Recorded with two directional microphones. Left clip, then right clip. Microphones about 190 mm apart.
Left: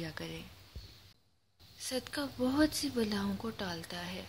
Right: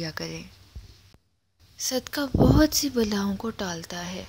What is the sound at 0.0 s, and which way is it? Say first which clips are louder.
Speech: right 9 dB; 35° right (ahead or behind).